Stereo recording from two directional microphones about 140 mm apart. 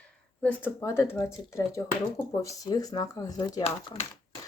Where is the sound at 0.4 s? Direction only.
15° left (ahead or behind).